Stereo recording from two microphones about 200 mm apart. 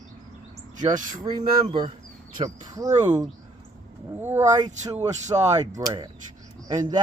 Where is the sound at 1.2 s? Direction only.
25° right (ahead or behind).